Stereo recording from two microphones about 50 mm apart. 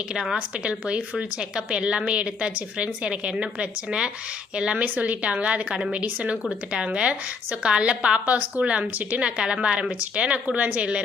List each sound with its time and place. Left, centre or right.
0.1 s a woman's voice: centre
0.3 s a woman's voice: right
9.2 s a woman's voice: right